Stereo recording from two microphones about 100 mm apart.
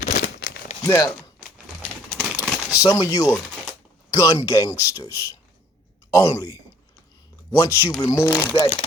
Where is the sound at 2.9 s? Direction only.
40° left (ahead or behind).